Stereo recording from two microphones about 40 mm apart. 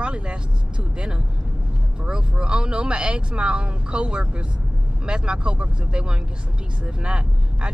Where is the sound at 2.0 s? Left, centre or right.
Right.